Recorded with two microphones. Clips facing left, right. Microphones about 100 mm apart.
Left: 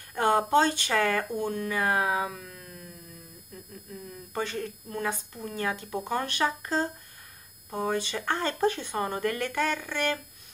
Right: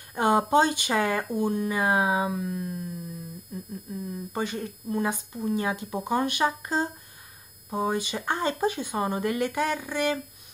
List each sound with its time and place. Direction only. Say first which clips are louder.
0.1 s speech: right 1 dB; 15° right (ahead or behind)